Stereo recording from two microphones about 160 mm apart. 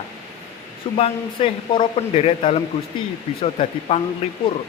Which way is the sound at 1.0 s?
35° left (ahead or behind).